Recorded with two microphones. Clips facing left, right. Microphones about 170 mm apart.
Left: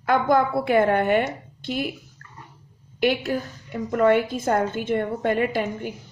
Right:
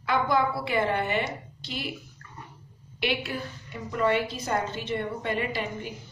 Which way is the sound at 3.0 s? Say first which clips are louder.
Left 7 dB; 45° left (ahead or behind).